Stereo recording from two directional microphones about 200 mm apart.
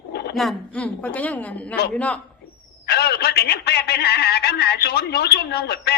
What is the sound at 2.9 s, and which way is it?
Speech, 55° left (ahead or behind).